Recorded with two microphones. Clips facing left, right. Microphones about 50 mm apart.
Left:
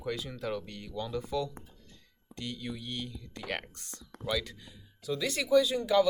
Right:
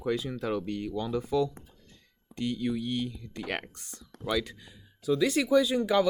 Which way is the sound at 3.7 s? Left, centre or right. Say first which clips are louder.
Even; centre.